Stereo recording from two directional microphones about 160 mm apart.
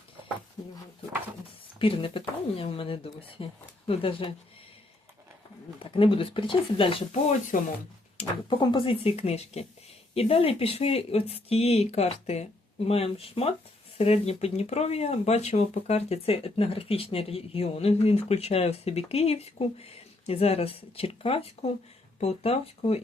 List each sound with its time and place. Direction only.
0.6 s speech: 25° left (ahead or behind)
1.8 s speech: 35° left (ahead or behind)
5.8 s speech: 35° left (ahead or behind)